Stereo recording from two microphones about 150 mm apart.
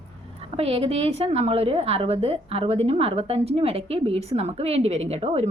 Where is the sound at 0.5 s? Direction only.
40° right (ahead or behind).